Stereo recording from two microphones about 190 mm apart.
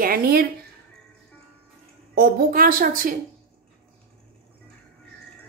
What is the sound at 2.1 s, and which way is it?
A woman's voice, 50° right (ahead or behind).